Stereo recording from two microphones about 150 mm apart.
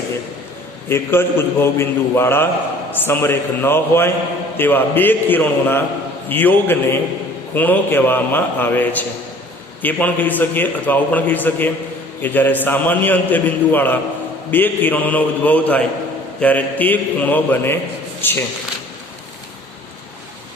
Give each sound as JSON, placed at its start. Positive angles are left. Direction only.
{"t": 0.9, "sound": "a man's voice", "side_deg": 15}